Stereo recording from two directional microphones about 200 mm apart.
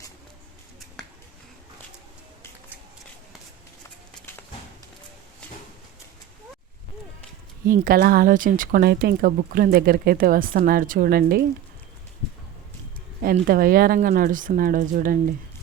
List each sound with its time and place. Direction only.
7.7 s speech: 45° right (ahead or behind)
13.2 s speech: 45° right (ahead or behind)